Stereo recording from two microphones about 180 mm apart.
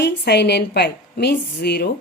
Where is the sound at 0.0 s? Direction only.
70° left (ahead or behind).